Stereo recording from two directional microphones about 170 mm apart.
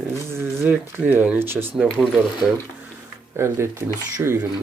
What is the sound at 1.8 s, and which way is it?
Speech, 5° left (ahead or behind).